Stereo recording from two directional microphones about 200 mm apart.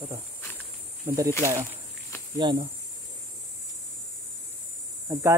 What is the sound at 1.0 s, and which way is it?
Speech, 15° right (ahead or behind).